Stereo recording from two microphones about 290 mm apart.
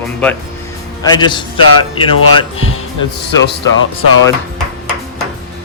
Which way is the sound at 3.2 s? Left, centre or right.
Left.